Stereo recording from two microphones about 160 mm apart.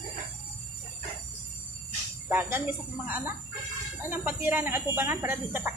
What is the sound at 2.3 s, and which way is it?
Speech, 15° right (ahead or behind).